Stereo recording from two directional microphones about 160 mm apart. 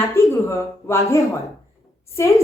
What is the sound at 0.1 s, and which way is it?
A woman's voice, 15° left (ahead or behind).